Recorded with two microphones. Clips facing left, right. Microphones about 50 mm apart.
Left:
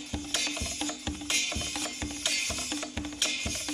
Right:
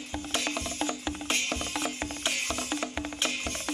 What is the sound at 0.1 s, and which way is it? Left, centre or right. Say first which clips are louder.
Music: right 3 dB; right.